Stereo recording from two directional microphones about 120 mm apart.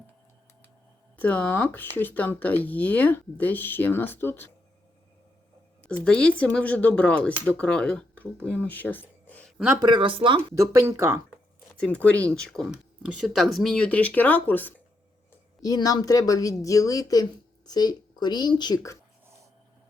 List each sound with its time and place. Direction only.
1.1 s speech: 15° left (ahead or behind)
5.8 s speech: 10° left (ahead or behind)
9.8 s speech: 40° right (ahead or behind)
10.5 s speech: 25° right (ahead or behind)
11.8 s speech: 10° left (ahead or behind)
12.7 s speech: 5° right (ahead or behind); by 14.7 s 15° left (ahead or behind)
15.6 s speech: 30° left (ahead or behind)